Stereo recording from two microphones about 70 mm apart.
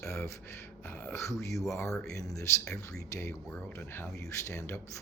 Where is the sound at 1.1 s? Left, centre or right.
Left.